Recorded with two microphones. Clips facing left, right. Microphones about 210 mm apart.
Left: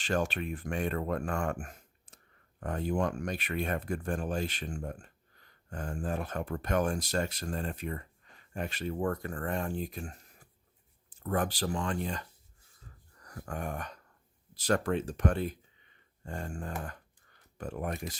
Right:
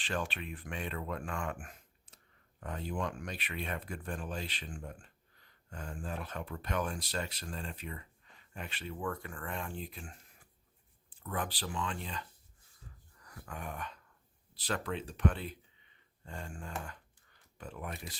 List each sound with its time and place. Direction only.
0.0 s speech: 45° left (ahead or behind)
13.2 s speech: 45° left (ahead or behind)